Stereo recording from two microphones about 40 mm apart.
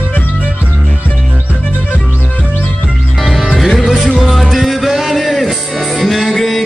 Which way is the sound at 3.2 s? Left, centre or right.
Centre.